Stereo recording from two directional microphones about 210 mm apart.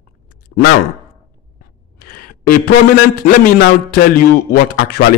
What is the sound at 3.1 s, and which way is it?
Speech, 45° left (ahead or behind).